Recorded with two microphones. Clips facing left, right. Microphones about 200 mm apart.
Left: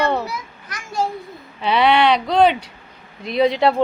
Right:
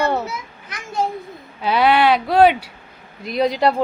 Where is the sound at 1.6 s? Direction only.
Centre (ahead or behind).